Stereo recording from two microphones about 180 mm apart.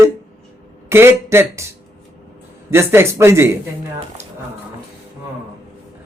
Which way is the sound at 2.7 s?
15° right (ahead or behind).